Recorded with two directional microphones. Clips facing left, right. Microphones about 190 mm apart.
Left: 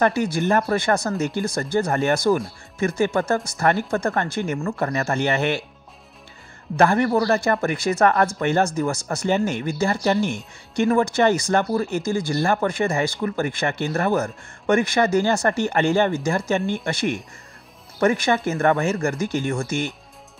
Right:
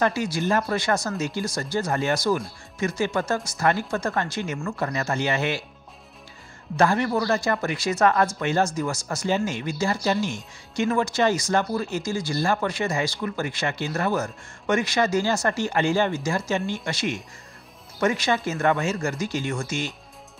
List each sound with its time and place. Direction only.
0.0 s speech: 55° left (ahead or behind)
6.8 s a man's voice: 55° left (ahead or behind)
7.3 s speech: 55° left (ahead or behind)